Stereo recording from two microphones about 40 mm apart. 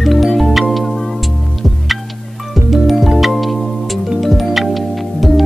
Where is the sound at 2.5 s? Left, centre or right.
Centre.